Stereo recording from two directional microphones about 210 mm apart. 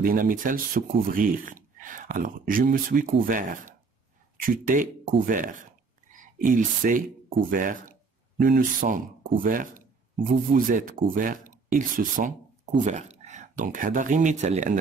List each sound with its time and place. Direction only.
0.0 s speech: 40° right (ahead or behind)